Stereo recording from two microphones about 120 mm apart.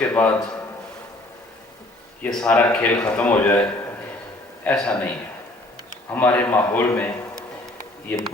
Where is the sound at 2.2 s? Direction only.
10° left (ahead or behind).